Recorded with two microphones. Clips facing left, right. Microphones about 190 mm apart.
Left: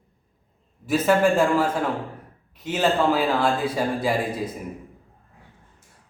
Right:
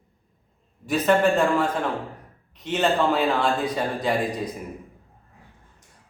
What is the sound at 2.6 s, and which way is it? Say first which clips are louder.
A man's voice: left 1 dB; 5° left (ahead or behind).